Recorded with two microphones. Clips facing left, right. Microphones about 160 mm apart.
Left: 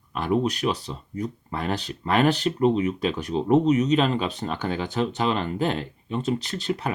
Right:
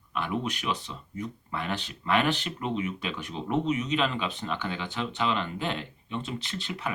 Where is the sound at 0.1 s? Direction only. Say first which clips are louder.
Left 7 dB; 40° left (ahead or behind).